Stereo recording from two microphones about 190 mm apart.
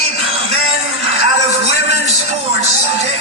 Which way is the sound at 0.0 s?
30° right (ahead or behind).